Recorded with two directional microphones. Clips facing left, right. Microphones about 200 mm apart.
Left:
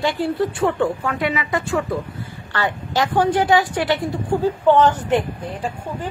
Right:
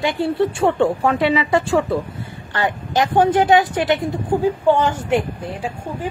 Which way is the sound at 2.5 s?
20° right (ahead or behind).